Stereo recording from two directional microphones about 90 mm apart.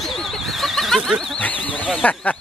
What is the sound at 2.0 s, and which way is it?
Speech, 15° left (ahead or behind).